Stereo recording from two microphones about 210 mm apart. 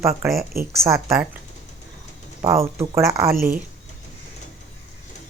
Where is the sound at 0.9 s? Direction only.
15° right (ahead or behind).